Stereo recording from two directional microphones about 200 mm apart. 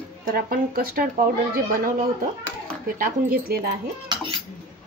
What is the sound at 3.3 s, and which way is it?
Speech, 50° right (ahead or behind).